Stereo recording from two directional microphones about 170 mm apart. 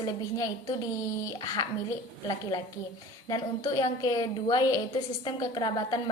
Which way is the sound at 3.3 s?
20° left (ahead or behind).